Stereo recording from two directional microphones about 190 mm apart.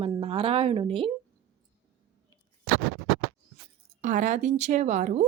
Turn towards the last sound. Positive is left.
turn(degrees=-40)  # may be behind; listen again after turning